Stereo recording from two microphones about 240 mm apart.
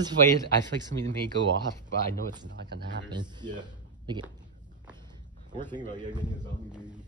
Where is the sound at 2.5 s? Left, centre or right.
Right.